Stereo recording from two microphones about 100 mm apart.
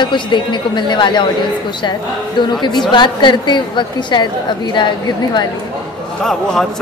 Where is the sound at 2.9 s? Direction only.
50° left (ahead or behind).